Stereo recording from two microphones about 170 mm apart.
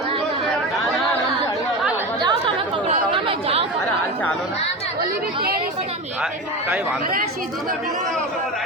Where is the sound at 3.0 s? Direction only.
30° right (ahead or behind).